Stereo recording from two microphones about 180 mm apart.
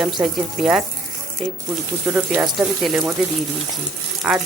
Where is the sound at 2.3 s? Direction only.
5° right (ahead or behind).